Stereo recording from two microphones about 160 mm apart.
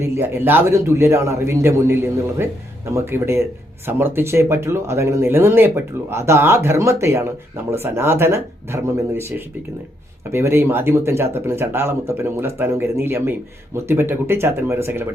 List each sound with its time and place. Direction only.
0.0 s speech: 15° right (ahead or behind)
10.3 s speech: 15° right (ahead or behind)